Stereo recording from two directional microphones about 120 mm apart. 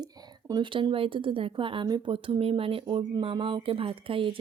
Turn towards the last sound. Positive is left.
turn(degrees=-45)  # may be behind; listen again after turning